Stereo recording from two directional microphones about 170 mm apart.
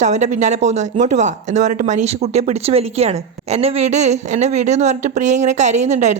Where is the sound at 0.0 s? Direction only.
45° right (ahead or behind).